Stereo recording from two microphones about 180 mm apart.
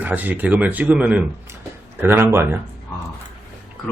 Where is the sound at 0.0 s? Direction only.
10° right (ahead or behind).